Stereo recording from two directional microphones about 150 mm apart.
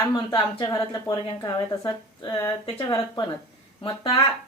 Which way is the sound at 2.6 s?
40° left (ahead or behind).